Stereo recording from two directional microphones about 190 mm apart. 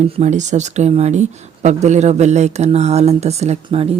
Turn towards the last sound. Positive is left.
turn(degrees=-30)  # may be behind; listen again after turning